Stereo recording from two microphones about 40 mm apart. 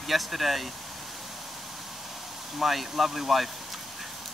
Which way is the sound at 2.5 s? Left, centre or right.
Centre.